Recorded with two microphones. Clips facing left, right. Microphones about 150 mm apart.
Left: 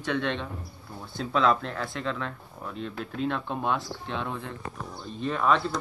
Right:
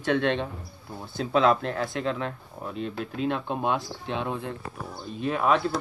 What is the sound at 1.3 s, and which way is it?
Speech, 20° right (ahead or behind).